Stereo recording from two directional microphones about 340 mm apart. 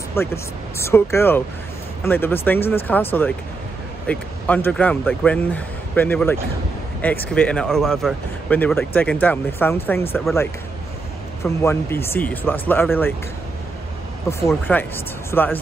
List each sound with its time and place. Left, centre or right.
0.1 s speech: centre
14.5 s speech: centre